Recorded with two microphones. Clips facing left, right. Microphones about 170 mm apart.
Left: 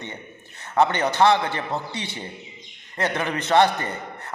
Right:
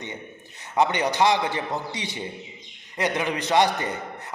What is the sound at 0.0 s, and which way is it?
A man's voice, 15° right (ahead or behind).